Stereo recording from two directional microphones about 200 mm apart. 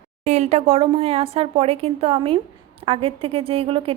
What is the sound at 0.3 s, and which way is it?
A woman's voice, 35° right (ahead or behind).